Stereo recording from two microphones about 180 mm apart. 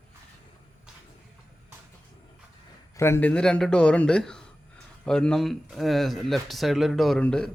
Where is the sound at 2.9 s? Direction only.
15° left (ahead or behind).